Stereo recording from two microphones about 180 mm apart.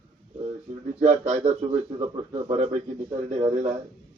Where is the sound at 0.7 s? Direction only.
35° right (ahead or behind).